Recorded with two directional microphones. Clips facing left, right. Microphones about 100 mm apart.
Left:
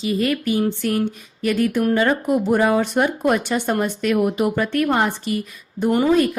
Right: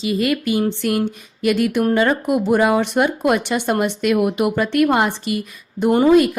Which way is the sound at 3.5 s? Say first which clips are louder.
Right 1 dB; 90° right.